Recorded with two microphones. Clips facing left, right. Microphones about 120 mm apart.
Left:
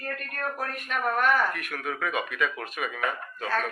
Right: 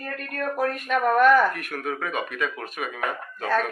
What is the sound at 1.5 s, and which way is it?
Speech, 45° right (ahead or behind).